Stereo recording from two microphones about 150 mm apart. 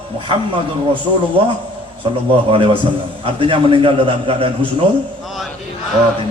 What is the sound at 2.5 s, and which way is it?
A man's voice, 35° right (ahead or behind).